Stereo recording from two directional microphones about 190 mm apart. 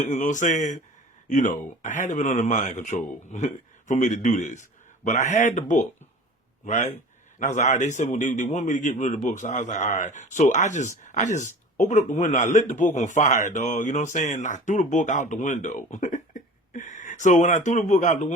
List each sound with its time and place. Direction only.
0.1 s a man's voice: 40° left (ahead or behind)